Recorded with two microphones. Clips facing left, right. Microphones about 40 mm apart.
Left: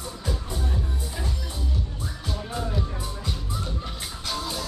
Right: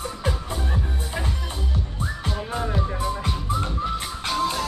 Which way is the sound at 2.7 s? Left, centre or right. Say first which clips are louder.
Right 6 dB; right.